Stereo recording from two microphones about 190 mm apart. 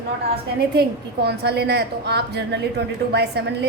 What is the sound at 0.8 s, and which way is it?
A woman's voice, 60° right (ahead or behind).